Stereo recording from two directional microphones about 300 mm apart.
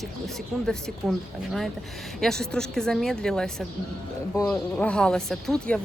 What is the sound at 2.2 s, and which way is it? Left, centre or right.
Speech, centre.